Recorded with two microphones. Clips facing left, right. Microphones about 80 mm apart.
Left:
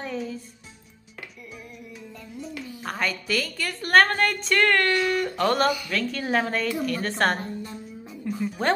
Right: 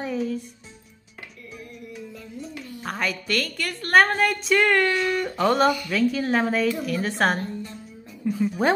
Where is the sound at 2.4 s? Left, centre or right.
Centre.